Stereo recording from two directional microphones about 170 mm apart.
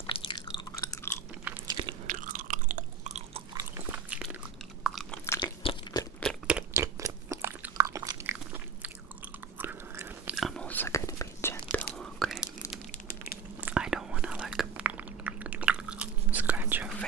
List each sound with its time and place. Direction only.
0.1 s chewing: 30° left (ahead or behind)
1.7 s biting: 25° right (ahead or behind)
2.0 s chewing: 50° right (ahead or behind)
3.5 s biting: 15° right (ahead or behind)
4.8 s chewing: centre (ahead or behind)
5.2 s biting: 15° left (ahead or behind)
5.6 s crunch: 35° left (ahead or behind)
6.2 s crunch: 5° right (ahead or behind)
9.6 s biting: 10° right (ahead or behind)
10.3 s whispering: centre (ahead or behind)
13.6 s whispering: 10° right (ahead or behind)